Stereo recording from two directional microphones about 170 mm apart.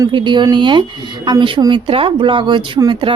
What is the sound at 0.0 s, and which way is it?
A woman's voice, 25° right (ahead or behind).